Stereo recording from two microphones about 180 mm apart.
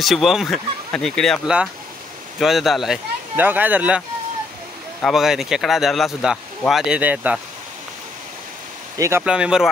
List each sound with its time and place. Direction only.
0.0 s speech: centre (ahead or behind)
5.0 s speech: centre (ahead or behind)
8.9 s speech: 15° right (ahead or behind)
9.2 s speech: 5° right (ahead or behind)